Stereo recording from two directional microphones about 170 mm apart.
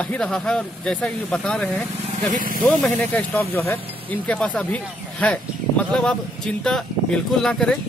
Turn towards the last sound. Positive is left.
turn(degrees=5)  # may be behind; listen again after turning